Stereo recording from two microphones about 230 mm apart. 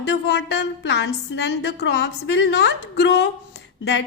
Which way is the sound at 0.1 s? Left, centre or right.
Left.